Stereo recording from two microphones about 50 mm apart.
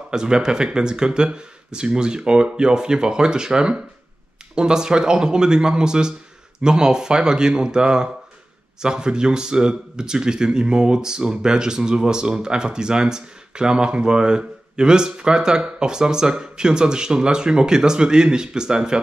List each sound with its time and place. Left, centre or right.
0.1 s speech: centre